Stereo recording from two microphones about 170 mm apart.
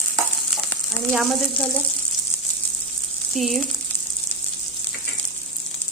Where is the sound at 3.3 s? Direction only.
Centre (ahead or behind).